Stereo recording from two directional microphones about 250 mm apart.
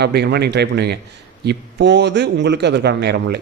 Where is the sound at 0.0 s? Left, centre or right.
Right.